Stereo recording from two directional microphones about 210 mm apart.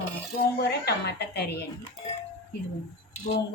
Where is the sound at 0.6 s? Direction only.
55° left (ahead or behind).